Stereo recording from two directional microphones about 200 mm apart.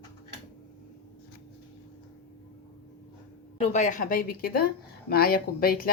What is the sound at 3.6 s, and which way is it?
Speech, 35° left (ahead or behind).